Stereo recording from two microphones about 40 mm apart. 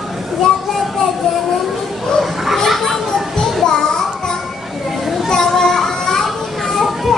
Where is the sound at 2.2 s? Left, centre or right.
Centre.